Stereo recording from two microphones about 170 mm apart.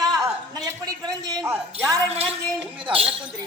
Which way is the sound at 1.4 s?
15° right (ahead or behind).